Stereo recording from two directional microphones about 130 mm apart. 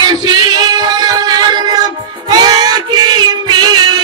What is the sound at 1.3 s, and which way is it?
Music, 30° right (ahead or behind).